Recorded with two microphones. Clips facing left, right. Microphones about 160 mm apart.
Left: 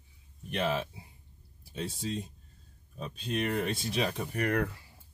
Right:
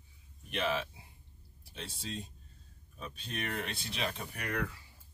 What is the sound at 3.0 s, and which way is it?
Speech, 40° left (ahead or behind).